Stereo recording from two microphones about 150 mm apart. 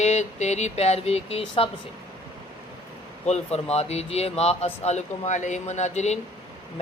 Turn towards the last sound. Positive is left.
turn(degrees=50)  # may be behind; listen again after turning